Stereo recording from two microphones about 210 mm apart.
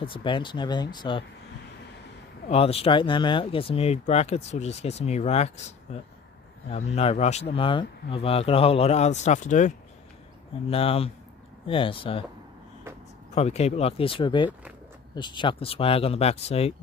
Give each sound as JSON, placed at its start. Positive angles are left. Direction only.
{"t": 0.0, "sound": "speech", "side_deg": 25}
{"t": 2.4, "sound": "speech", "side_deg": 30}
{"t": 13.3, "sound": "speech", "side_deg": 30}